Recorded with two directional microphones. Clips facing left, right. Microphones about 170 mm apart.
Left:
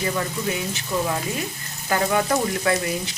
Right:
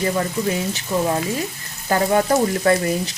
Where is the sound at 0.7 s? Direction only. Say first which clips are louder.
Right 4 dB; 35° right (ahead or behind).